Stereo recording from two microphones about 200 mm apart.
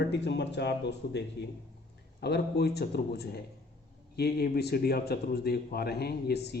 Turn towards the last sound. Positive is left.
turn(degrees=55)  # may be behind; listen again after turning